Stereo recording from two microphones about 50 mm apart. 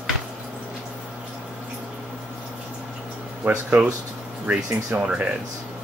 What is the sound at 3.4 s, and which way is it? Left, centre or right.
Speech, right.